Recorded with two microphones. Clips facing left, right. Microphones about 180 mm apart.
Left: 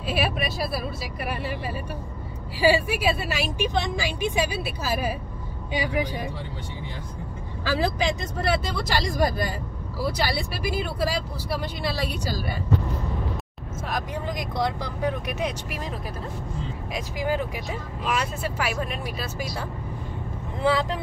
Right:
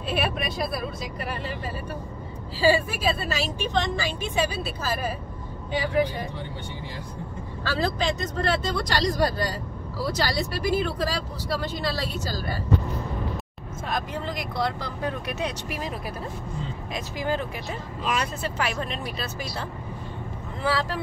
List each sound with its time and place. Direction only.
0.1 s speech: 5° left (ahead or behind)
2.6 s speech: 15° left (ahead or behind)
7.6 s speech: 10° left (ahead or behind)
13.8 s speech: 10° left (ahead or behind)
16.9 s speech: 10° left (ahead or behind)
20.6 s speech: 20° left (ahead or behind)